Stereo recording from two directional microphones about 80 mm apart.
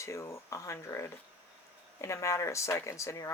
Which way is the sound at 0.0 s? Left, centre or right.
Left.